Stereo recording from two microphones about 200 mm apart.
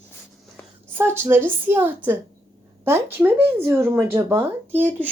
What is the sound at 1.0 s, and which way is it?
Speech, 10° right (ahead or behind).